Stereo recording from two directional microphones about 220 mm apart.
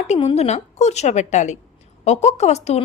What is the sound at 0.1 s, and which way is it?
A woman's voice, 25° left (ahead or behind).